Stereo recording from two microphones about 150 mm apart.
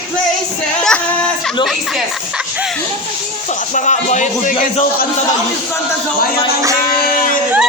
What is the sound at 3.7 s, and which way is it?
Music, 55° left (ahead or behind).